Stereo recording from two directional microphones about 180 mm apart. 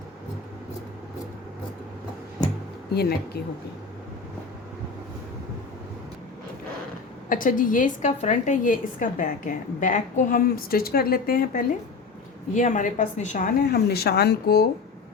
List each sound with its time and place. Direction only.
2.9 s a woman's voice: 60° left (ahead or behind)
7.3 s a woman's voice: 50° left (ahead or behind)